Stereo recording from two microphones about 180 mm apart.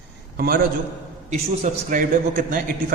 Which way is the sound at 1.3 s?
45° right (ahead or behind).